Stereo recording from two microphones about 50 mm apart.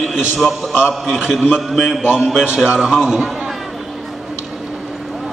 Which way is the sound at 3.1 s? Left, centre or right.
Centre.